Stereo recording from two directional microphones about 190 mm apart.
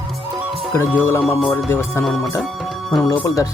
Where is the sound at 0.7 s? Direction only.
10° left (ahead or behind).